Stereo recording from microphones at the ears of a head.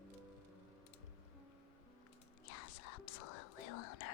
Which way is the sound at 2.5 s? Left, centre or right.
Left.